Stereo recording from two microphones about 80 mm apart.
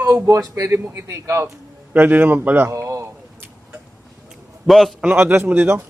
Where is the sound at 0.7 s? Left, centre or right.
Right.